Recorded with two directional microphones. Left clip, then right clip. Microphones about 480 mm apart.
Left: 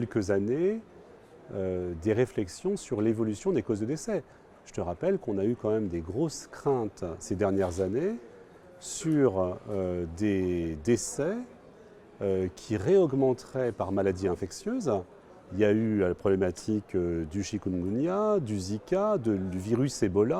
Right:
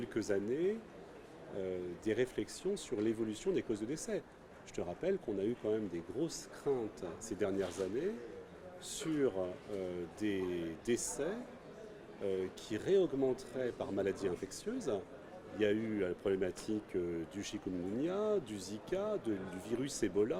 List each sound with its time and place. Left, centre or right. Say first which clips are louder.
0.0 s speech: left 8 dB; left